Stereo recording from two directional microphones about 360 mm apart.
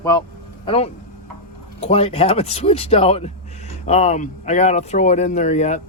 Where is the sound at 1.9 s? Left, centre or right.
Centre.